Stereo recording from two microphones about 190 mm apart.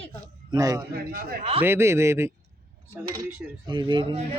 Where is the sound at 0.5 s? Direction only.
20° right (ahead or behind).